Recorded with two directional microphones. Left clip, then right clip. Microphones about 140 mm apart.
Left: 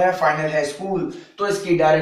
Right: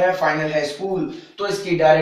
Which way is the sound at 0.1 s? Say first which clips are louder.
Even; centre (ahead or behind).